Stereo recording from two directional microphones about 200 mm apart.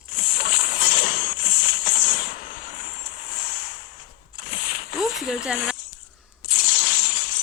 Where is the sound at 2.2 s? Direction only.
45° left (ahead or behind).